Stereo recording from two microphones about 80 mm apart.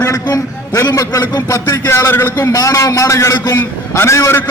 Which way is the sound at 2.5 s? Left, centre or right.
Left.